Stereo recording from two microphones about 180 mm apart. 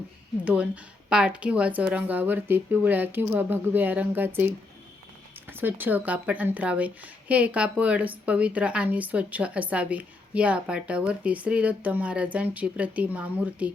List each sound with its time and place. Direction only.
0.4 s a woman's voice: 5° right (ahead or behind)